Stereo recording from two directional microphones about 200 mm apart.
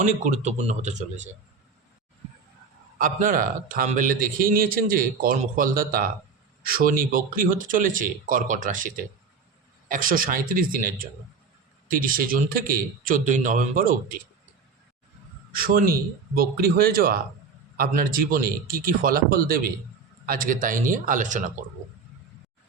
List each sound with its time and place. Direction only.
0.0 s a man's voice: 40° right (ahead or behind)
3.0 s a man's voice: 40° right (ahead or behind)
15.5 s a man's voice: 45° right (ahead or behind)